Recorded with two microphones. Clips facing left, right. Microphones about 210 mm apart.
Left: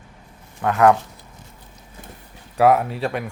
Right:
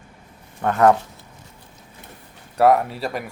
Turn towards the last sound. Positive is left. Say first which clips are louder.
# even
turn(degrees=0)  # may be behind; listen again after turning